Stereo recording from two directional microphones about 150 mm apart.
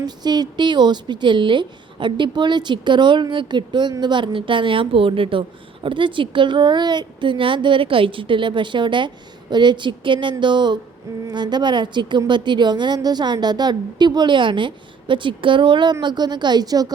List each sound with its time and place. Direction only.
0.0 s a woman's voice: 25° right (ahead or behind)